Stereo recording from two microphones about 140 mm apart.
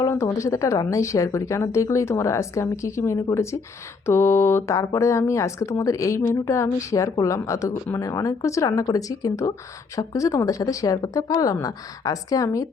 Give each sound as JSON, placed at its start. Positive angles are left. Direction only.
{"t": 0.0, "sound": "speech", "side_deg": 20}